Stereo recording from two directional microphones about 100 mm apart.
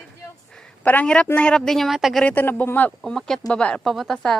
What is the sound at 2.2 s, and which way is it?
Speech, 20° left (ahead or behind).